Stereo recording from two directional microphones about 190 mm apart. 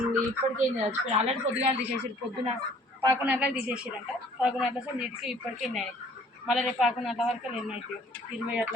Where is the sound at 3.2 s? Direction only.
5° right (ahead or behind).